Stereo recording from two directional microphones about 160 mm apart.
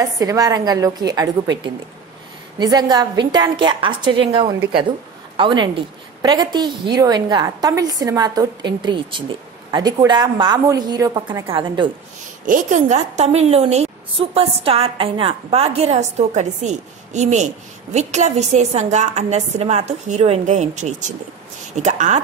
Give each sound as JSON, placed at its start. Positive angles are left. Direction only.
{"t": 0.0, "sound": "a woman's voice", "side_deg": -20}
{"t": 12.4, "sound": "a woman's voice", "side_deg": -55}